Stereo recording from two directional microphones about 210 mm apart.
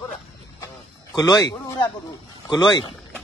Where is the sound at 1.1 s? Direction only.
20° left (ahead or behind).